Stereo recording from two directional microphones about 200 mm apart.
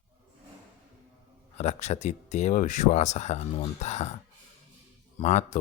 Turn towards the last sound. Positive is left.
turn(degrees=35)  # may be behind; listen again after turning